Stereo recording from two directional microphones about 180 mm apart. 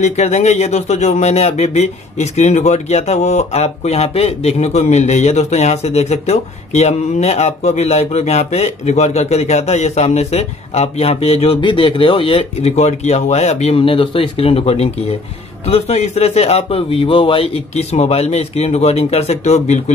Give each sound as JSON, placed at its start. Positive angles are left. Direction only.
{"t": 0.0, "sound": "speech", "side_deg": 40}